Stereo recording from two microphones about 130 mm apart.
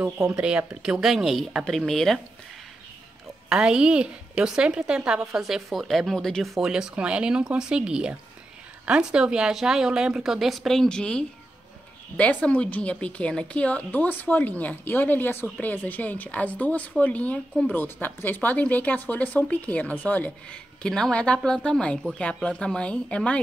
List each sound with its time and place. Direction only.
0.0 s speech: 20° right (ahead or behind)
0.4 s speech: 10° right (ahead or behind)
3.4 s a woman's voice: 5° right (ahead or behind)